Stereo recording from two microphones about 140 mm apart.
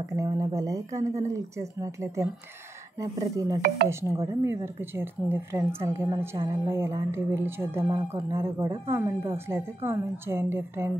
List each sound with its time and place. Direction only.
0.1 s a woman's voice: 25° right (ahead or behind)